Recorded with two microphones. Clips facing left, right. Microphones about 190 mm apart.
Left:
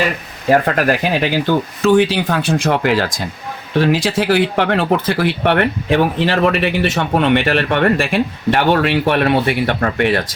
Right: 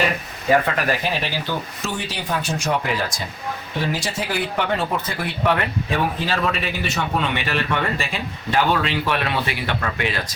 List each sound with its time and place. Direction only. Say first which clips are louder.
0.5 s speech: left 5 dB; 45° left (ahead or behind); by 10.2 s 60° left (ahead or behind)